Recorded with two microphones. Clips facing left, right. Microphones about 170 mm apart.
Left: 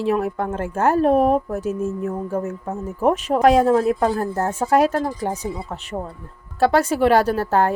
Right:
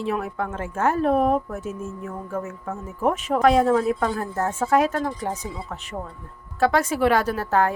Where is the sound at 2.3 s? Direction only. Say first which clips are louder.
Left 5 dB; 35° left (ahead or behind).